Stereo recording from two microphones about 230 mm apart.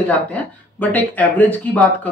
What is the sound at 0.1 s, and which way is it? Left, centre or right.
Speech, centre.